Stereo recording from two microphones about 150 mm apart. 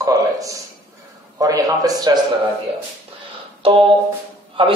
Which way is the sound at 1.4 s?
25° right (ahead or behind).